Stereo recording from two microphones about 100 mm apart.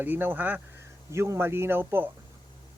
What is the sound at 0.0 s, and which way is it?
Speech, 20° right (ahead or behind).